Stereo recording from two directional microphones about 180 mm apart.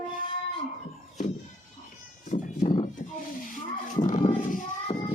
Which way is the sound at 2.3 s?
45° left (ahead or behind).